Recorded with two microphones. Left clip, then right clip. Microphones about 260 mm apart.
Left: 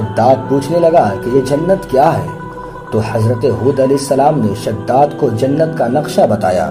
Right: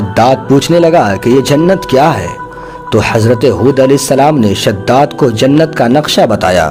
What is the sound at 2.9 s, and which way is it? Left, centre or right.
A man's voice, right.